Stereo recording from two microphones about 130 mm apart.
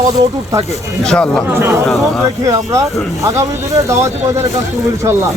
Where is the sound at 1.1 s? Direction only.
5° left (ahead or behind).